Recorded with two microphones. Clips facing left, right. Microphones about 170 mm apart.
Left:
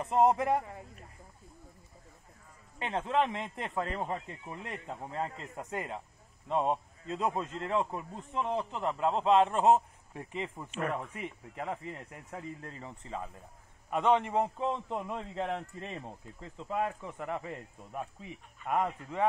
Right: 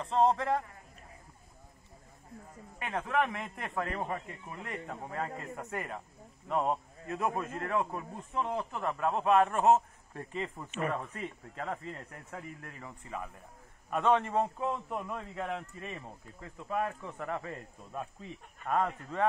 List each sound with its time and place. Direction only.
0.0 s a man's voice: 15° left (ahead or behind)
2.8 s a man's voice: 25° left (ahead or behind)
10.7 s speech: centre (ahead or behind)
11.1 s a man's voice: 15° left (ahead or behind)